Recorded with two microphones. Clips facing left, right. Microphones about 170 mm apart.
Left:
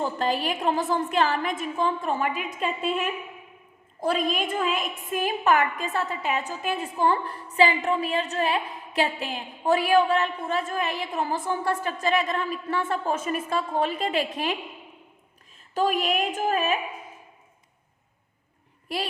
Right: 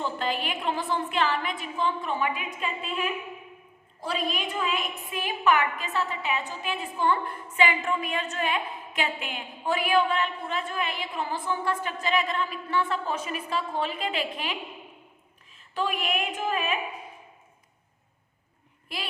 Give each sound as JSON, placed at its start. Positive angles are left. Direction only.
{"t": 0.0, "sound": "a woman's voice", "side_deg": 40}
{"t": 15.7, "sound": "a woman's voice", "side_deg": 40}